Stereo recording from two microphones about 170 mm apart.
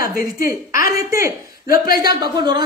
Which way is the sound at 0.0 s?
55° left (ahead or behind).